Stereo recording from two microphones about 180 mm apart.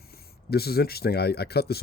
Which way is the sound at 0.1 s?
60° left (ahead or behind).